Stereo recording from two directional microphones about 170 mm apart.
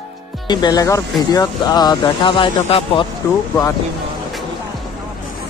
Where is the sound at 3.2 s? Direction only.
15° left (ahead or behind).